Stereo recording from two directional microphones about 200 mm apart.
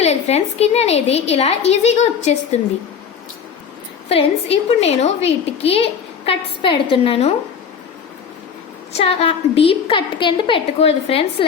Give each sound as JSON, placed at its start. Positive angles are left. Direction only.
{"t": 0.0, "sound": "a woman's voice", "side_deg": 35}
{"t": 4.1, "sound": "a woman's voice", "side_deg": 30}
{"t": 9.0, "sound": "a woman's voice", "side_deg": 30}